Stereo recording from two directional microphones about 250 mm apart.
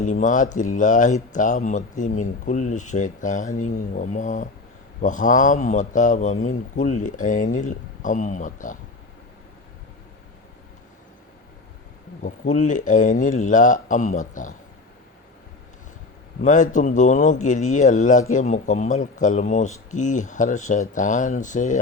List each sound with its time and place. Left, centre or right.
0.0 s speech: left
12.2 s speech: left
16.4 s speech: left